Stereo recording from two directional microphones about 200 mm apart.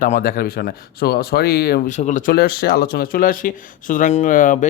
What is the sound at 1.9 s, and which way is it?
Speech, 35° left (ahead or behind).